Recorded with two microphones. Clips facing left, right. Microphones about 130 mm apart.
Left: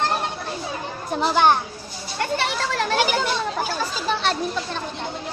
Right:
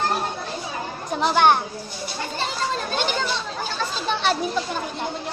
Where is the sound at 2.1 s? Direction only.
70° left (ahead or behind).